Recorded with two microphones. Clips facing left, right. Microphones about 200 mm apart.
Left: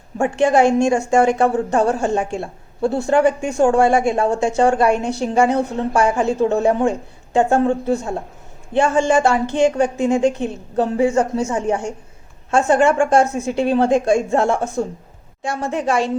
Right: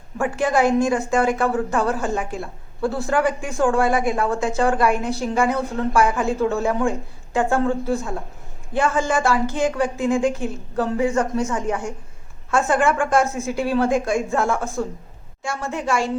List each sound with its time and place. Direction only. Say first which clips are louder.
0.2 s speech: left 5 dB; 25° left (ahead or behind)